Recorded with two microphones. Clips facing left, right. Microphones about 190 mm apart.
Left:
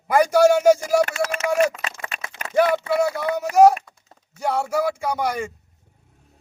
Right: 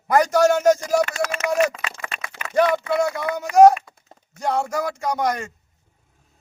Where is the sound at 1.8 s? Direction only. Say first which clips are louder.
Even; 30° left (ahead or behind).